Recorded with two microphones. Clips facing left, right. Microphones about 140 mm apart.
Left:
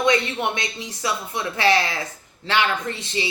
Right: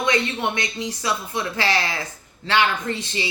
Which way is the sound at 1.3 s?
20° left (ahead or behind).